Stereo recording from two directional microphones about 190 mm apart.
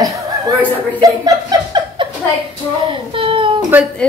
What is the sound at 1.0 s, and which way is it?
A child's voice, 20° right (ahead or behind).